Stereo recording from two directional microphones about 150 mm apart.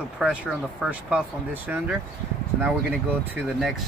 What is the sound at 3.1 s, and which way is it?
Speech, 5° right (ahead or behind).